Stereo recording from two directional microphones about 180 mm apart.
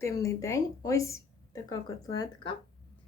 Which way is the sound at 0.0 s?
15° left (ahead or behind).